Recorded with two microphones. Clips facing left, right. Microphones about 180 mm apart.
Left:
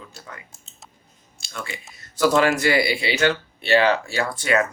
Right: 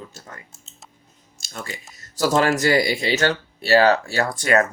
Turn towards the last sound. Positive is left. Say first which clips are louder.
# right 2 dB
turn(degrees=-40)  # may be behind; listen again after turning